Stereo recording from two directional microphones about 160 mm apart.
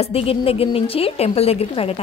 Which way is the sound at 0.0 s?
35° left (ahead or behind).